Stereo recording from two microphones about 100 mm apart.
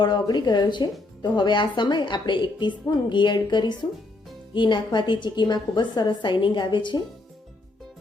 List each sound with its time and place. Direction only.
0.0 s a woman's voice: 45° left (ahead or behind)